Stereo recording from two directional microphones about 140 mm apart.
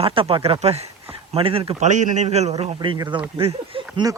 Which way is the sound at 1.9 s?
60° right (ahead or behind).